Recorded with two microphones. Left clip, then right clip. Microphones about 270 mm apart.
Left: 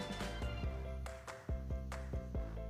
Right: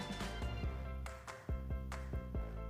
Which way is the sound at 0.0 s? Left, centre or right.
Centre.